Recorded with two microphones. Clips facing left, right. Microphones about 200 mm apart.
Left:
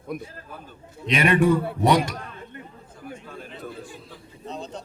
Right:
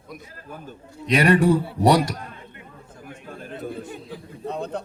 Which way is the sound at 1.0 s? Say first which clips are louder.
Right 2 dB; 40° right (ahead or behind).